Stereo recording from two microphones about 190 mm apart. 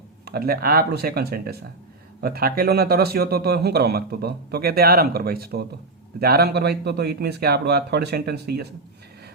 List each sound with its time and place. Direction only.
0.3 s a man's voice: 55° right (ahead or behind)